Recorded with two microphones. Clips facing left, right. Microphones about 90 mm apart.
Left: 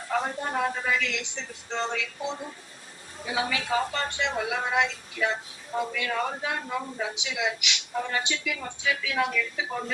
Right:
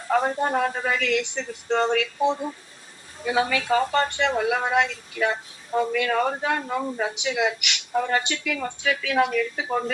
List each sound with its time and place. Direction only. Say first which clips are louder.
0.1 s a woman's voice: right 7 dB; 50° right (ahead or behind)